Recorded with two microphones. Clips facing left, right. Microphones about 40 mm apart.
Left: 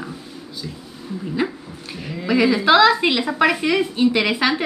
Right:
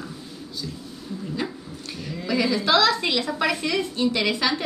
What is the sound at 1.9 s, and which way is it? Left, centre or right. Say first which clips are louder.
A woman's voice: left 5 dB; centre.